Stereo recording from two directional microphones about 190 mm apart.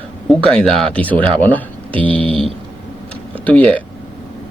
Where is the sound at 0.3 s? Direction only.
5° left (ahead or behind).